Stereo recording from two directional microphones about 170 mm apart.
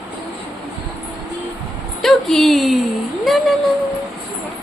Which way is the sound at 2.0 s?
Centre (ahead or behind).